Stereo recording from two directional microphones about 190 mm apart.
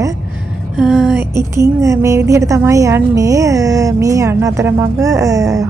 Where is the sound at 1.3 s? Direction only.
15° right (ahead or behind).